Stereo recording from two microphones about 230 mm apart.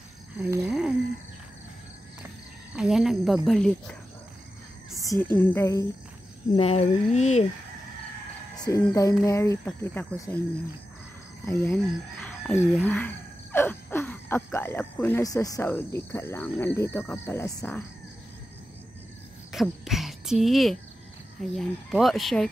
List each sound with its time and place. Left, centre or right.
0.4 s frog: centre
2.7 s speech: centre
5.0 s speech: centre
6.5 s speech: left
8.5 s speech: centre
11.6 s speech: centre
19.5 s a sound: centre
20.4 s speech: centre